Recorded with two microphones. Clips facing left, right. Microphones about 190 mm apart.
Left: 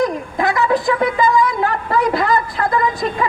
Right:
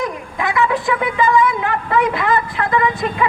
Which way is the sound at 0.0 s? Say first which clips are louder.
Left 5 dB; 40° left (ahead or behind).